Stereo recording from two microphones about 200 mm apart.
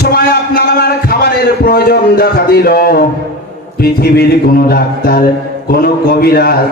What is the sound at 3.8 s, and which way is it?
Speech, 50° left (ahead or behind).